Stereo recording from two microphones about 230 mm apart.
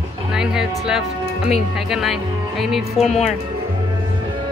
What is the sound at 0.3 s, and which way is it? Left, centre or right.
Music, centre.